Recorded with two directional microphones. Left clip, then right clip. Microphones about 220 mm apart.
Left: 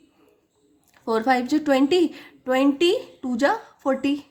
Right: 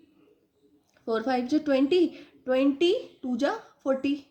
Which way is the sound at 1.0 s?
35° left (ahead or behind).